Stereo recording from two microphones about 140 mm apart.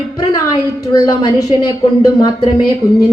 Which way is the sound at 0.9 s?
25° left (ahead or behind).